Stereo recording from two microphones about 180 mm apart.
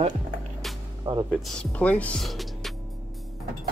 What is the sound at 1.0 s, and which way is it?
Speech, 20° right (ahead or behind).